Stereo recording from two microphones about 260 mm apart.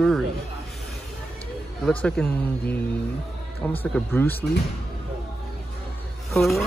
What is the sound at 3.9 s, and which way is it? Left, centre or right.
Speech, centre.